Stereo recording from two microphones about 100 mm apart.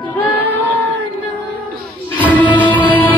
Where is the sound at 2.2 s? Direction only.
15° left (ahead or behind).